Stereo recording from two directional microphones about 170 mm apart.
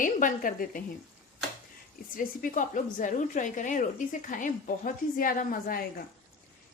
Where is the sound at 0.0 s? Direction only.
50° left (ahead or behind).